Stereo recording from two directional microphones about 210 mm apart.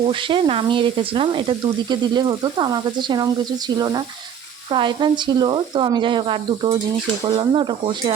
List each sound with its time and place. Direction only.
0.0 s speech: 25° right (ahead or behind)